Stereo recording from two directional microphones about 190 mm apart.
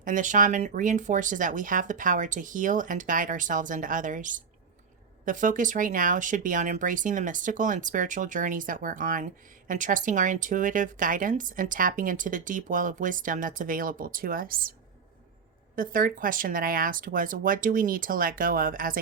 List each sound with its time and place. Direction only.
0.0 s speech: 40° right (ahead or behind)
15.7 s speech: 45° right (ahead or behind)